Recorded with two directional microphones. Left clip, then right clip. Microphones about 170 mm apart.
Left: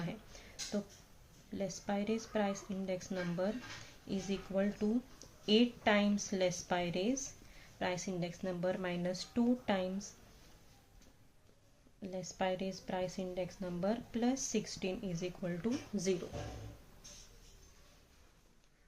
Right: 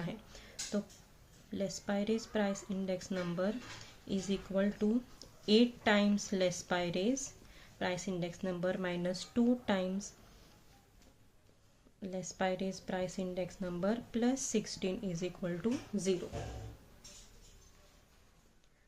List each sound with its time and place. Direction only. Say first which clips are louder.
1.5 s a woman's voice: right 2 dB; 15° right (ahead or behind)
12.0 s a woman's voice: right 1 dB; 20° right (ahead or behind)